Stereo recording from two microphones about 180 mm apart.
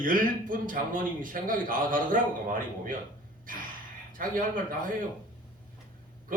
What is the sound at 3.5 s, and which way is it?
Gasp, 50° right (ahead or behind).